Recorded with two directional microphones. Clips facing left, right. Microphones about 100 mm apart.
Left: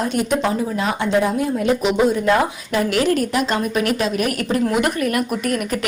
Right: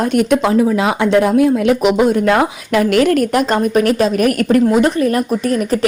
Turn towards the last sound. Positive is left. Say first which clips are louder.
# right 6 dB
turn(degrees=-35)  # may be behind; listen again after turning